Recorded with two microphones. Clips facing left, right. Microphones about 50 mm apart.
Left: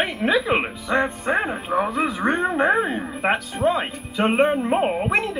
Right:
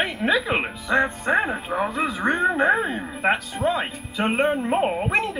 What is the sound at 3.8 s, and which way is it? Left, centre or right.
Speech, centre.